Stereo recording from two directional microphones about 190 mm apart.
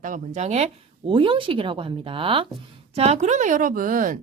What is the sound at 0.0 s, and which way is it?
A woman's voice, 40° right (ahead or behind).